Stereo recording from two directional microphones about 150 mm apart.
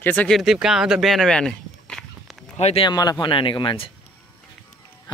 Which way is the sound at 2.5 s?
40° left (ahead or behind).